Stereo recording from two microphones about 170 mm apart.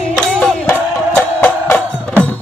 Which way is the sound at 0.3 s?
5° left (ahead or behind).